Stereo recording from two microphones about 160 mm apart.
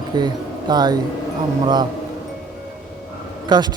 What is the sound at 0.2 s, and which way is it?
A man's voice, 25° right (ahead or behind).